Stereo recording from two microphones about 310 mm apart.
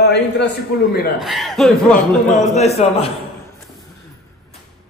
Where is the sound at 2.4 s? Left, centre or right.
Left.